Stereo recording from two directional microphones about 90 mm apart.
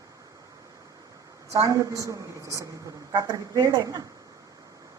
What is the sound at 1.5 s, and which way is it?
A woman's voice, 35° right (ahead or behind).